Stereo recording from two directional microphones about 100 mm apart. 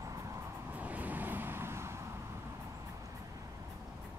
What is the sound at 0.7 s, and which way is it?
Vehicle, 15° right (ahead or behind).